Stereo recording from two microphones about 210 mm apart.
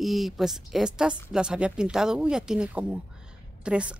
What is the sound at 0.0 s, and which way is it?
A woman's voice, centre (ahead or behind).